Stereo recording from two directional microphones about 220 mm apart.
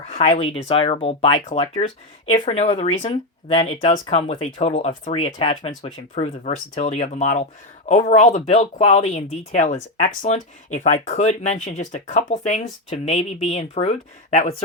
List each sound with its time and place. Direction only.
0.1 s speech: 30° left (ahead or behind)